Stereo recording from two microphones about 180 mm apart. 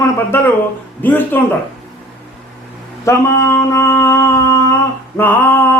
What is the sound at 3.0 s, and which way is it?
Mantra, 15° left (ahead or behind).